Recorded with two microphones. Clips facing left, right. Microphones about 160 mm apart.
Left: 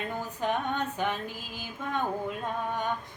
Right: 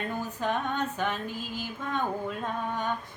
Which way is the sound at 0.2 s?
15° left (ahead or behind).